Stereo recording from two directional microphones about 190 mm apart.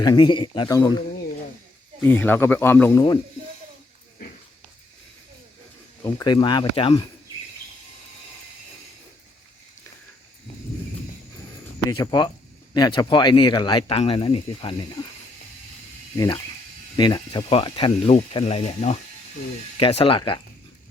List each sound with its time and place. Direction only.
0.0 s speech: 25° left (ahead or behind)
2.0 s speech: 10° left (ahead or behind)
6.0 s speech: 20° left (ahead or behind)
11.9 s speech: 20° left (ahead or behind)
16.1 s speech: 20° left (ahead or behind)